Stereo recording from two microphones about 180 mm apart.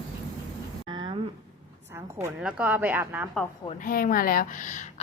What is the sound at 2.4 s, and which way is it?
Speech, 10° right (ahead or behind).